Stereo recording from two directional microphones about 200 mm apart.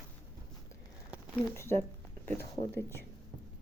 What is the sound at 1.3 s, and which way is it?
Speech, 10° left (ahead or behind).